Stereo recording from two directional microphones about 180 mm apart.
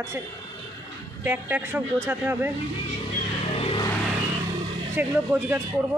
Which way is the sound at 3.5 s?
35° left (ahead or behind).